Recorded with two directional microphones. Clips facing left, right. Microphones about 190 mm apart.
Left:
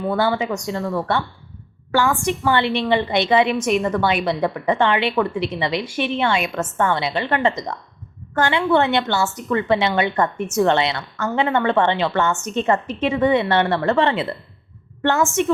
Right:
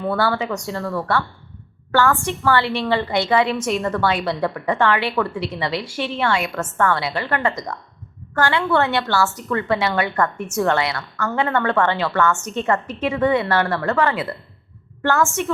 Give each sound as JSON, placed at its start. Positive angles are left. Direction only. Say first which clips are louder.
{"t": 0.1, "sound": "a woman's voice", "louder": "left 1 dB", "side_deg": 15}